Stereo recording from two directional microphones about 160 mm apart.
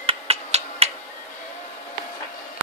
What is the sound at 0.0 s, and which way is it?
Finger snapping, 40° right (ahead or behind).